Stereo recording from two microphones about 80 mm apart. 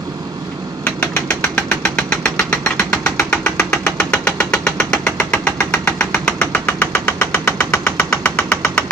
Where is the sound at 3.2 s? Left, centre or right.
Centre; by 7.8 s left.